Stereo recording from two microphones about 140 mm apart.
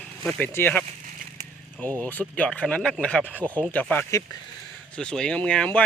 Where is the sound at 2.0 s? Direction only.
10° left (ahead or behind).